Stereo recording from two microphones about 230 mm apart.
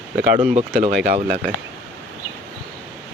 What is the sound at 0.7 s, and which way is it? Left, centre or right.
Speech, right.